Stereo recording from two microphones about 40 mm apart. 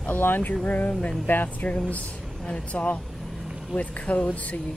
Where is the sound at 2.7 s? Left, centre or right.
Left.